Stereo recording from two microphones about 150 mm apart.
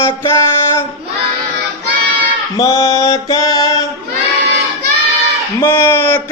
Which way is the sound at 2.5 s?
20° left (ahead or behind).